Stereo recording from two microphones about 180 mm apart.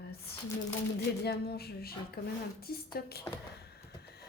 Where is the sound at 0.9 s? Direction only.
60° left (ahead or behind).